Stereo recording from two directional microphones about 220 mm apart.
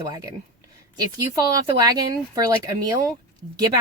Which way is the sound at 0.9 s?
15° right (ahead or behind).